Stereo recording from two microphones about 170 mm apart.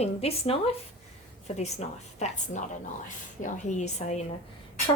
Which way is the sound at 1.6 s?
40° left (ahead or behind).